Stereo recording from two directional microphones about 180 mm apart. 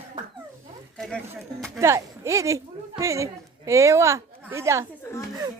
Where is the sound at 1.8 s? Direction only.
15° right (ahead or behind).